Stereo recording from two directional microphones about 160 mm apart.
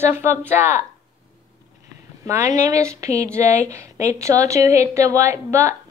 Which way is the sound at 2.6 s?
20° right (ahead or behind).